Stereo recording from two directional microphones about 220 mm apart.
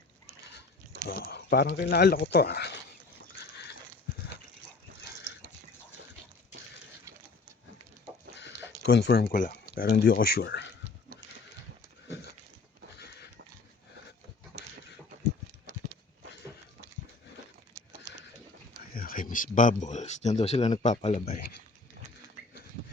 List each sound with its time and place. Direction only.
1.0 s speech: 45° left (ahead or behind)
8.4 s a sound: 50° left (ahead or behind)
9.3 s speech: 40° left (ahead or behind)
18.9 s speech: 40° left (ahead or behind)